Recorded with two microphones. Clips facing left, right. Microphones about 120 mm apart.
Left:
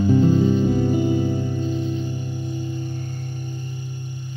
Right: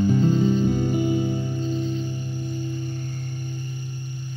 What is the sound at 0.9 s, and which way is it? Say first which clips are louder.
Music: left 2 dB; 25° left (ahead or behind).